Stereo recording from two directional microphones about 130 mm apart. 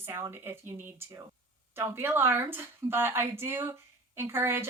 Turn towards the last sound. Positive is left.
turn(degrees=-20)  # may be behind; listen again after turning